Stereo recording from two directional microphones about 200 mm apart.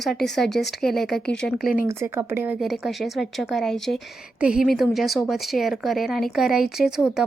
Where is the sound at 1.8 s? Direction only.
10° right (ahead or behind).